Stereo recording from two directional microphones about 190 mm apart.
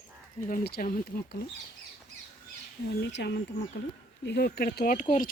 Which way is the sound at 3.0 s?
60° left (ahead or behind).